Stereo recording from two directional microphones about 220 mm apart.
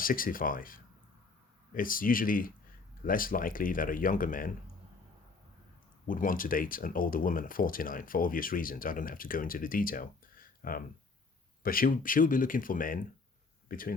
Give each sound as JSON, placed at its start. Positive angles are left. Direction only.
{"t": 0.0, "sound": "speech", "side_deg": 40}
{"t": 6.1, "sound": "speech", "side_deg": 40}